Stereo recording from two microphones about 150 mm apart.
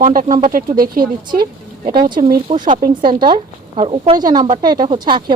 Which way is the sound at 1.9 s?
30° right (ahead or behind).